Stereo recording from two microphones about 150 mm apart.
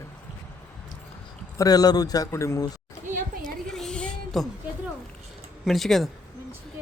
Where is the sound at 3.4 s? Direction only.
5° left (ahead or behind).